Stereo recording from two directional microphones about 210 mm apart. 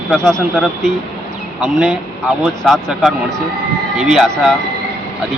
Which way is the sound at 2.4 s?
Centre (ahead or behind).